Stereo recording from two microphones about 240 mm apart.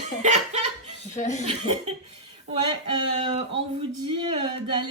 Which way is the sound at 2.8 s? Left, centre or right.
Right.